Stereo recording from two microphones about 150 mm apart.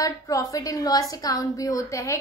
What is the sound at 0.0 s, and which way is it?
A woman's voice, 25° left (ahead or behind).